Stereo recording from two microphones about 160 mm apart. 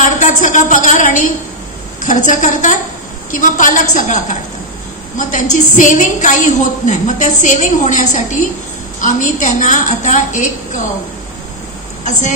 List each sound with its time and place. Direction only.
0.0 s a woman's voice: 50° left (ahead or behind)
12.0 s speech: 50° left (ahead or behind)